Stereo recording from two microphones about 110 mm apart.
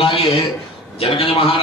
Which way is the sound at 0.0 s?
60° left (ahead or behind).